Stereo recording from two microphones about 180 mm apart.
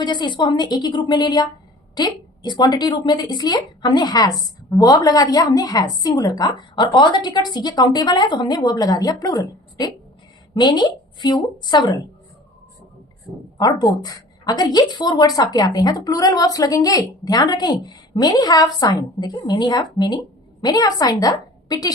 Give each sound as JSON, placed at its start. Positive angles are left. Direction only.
{"t": 0.0, "sound": "a woman's voice", "side_deg": 25}
{"t": 13.6, "sound": "a woman's voice", "side_deg": 20}